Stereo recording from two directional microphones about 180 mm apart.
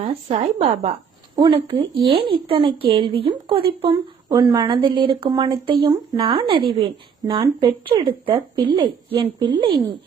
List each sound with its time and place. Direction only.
0.0 s a woman's voice: 35° right (ahead or behind)